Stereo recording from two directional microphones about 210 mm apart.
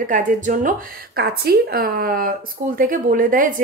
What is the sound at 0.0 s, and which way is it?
Speech, 40° right (ahead or behind).